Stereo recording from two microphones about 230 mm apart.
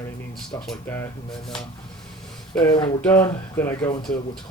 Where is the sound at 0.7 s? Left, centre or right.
Centre.